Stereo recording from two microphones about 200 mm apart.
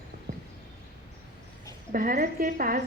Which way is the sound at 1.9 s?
45° right (ahead or behind).